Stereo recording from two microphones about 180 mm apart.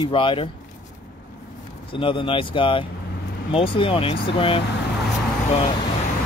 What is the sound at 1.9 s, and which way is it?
Speech, 30° left (ahead or behind).